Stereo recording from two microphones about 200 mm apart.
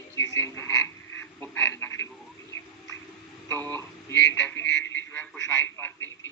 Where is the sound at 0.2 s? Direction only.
15° left (ahead or behind).